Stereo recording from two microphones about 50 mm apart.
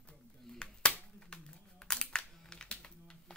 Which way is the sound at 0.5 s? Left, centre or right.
Centre.